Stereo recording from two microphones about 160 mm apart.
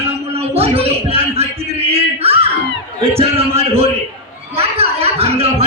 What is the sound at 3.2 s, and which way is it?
Speech, 40° right (ahead or behind).